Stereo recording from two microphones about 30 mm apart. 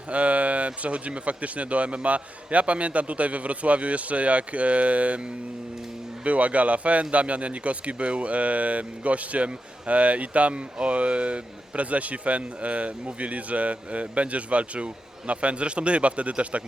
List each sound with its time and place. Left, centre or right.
0.1 s speech: right
6.2 s speech: right